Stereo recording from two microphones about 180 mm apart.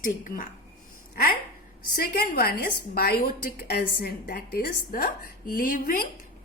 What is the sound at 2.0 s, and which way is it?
A woman's voice, 55° left (ahead or behind).